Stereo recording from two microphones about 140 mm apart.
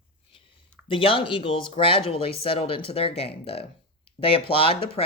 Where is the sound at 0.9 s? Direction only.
40° left (ahead or behind).